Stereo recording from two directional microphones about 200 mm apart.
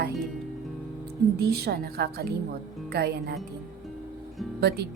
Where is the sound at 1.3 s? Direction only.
55° right (ahead or behind).